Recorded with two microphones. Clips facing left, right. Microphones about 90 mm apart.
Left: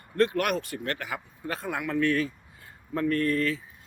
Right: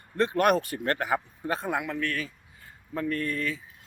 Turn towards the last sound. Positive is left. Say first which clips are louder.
# left 4 dB
turn(degrees=-5)  # may be behind; listen again after turning